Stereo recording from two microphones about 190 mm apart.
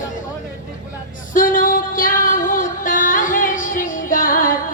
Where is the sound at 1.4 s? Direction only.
45° left (ahead or behind).